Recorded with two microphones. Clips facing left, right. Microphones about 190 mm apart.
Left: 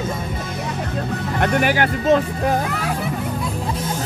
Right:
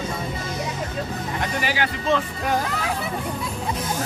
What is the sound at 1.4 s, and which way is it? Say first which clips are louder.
Speech: left 8 dB; 60° left (ahead or behind).